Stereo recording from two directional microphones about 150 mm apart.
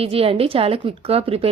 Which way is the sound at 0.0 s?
40° right (ahead or behind).